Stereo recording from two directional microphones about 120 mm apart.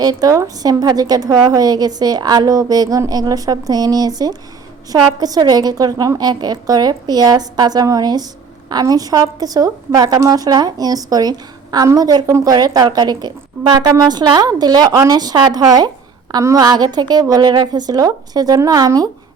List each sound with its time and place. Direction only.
0.0 s a woman's voice: 30° right (ahead or behind)